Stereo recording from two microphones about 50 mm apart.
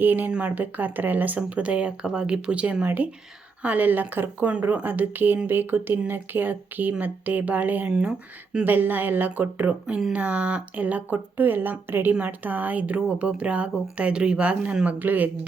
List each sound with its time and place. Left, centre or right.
0.0 s speech: right
0.3 s speech: right
0.5 s speech: right
1.4 s speech: right
2.8 s speech: right
7.9 s speech: centre
8.6 s speech: right
14.9 s speech: right